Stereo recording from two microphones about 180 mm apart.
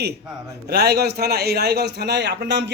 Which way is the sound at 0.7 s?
65° right (ahead or behind).